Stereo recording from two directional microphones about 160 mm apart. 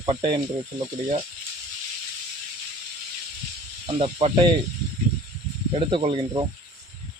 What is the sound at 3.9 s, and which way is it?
Speech, 35° right (ahead or behind).